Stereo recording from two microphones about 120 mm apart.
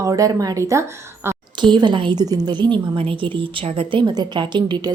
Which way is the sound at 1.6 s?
40° right (ahead or behind).